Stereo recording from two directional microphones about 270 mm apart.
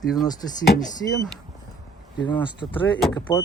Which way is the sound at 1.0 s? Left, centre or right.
Left.